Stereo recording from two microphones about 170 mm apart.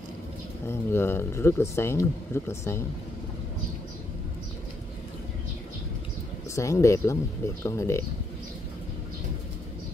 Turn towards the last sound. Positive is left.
turn(degrees=15)  # may be behind; listen again after turning